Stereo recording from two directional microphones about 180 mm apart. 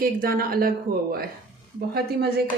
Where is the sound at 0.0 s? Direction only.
55° right (ahead or behind).